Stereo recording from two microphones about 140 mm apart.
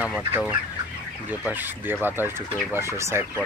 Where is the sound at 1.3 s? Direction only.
15° right (ahead or behind).